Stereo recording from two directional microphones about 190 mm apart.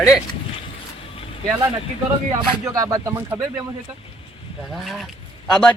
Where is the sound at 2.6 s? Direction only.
20° right (ahead or behind).